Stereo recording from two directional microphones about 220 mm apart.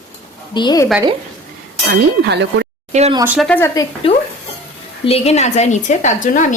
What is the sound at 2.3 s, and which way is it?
Speech, 50° right (ahead or behind).